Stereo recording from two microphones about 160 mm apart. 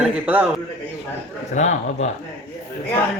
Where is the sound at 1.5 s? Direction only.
50° left (ahead or behind).